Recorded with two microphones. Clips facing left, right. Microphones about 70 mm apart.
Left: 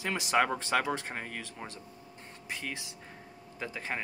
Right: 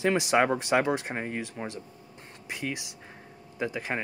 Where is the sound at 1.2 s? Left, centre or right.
Right.